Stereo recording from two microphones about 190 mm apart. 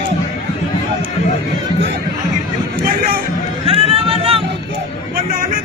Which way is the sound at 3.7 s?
30° right (ahead or behind).